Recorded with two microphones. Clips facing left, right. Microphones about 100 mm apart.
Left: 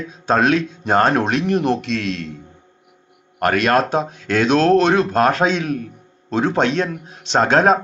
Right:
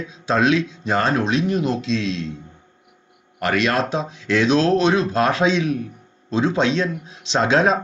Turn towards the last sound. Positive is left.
turn(degrees=50)  # may be behind; listen again after turning